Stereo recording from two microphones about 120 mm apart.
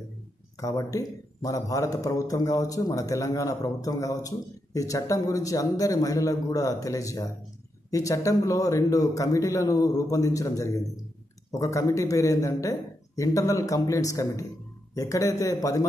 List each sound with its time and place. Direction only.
0.6 s speech: 30° left (ahead or behind)